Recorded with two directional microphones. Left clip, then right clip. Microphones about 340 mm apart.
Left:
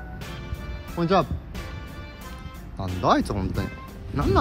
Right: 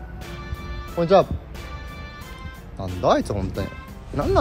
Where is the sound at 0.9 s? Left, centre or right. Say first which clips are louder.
Right 5 dB; centre.